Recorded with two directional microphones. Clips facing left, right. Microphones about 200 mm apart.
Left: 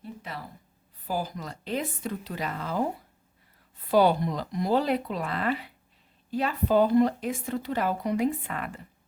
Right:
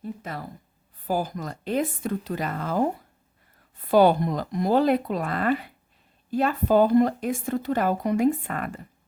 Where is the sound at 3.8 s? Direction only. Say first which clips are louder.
Right 4 dB; 50° right (ahead or behind).